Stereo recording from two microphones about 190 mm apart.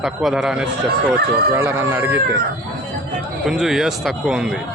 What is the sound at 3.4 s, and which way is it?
A man's voice, centre (ahead or behind).